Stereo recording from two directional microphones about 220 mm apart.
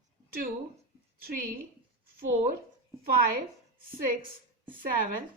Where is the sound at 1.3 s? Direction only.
40° right (ahead or behind).